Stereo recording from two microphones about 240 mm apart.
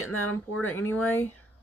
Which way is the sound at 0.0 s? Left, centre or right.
Left.